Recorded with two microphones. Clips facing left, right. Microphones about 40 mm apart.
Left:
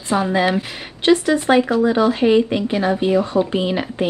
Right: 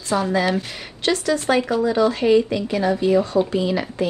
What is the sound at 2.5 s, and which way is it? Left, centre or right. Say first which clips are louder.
A woman's voice: left 2 dB; left.